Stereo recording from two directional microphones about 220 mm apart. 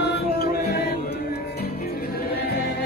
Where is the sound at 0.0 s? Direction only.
45° left (ahead or behind).